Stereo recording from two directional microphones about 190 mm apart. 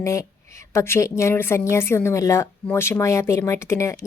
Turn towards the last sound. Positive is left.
turn(degrees=15)  # may be behind; listen again after turning